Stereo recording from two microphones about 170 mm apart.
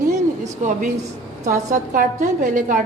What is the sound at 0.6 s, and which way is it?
A woman's voice, 45° right (ahead or behind).